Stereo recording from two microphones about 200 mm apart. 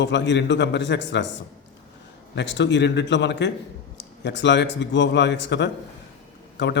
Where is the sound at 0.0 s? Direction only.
60° left (ahead or behind).